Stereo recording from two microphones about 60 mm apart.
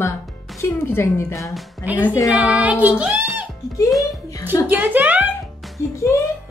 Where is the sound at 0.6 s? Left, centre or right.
Left.